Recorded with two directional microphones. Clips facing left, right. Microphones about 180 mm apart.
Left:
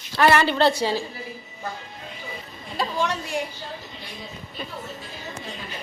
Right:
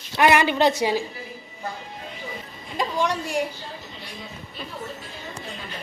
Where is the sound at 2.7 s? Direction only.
15° right (ahead or behind).